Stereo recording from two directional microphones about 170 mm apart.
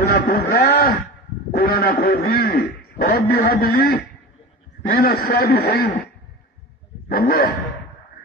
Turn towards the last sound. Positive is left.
turn(degrees=65)  # may be behind; listen again after turning